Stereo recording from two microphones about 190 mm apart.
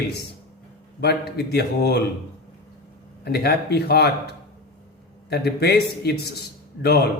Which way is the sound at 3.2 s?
60° left (ahead or behind).